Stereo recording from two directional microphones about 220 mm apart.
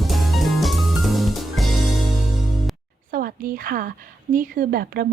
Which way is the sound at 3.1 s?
40° right (ahead or behind).